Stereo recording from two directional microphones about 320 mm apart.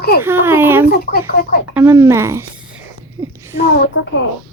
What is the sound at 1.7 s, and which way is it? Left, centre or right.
Speech, centre.